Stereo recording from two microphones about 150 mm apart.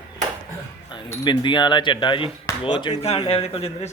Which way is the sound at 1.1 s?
25° left (ahead or behind).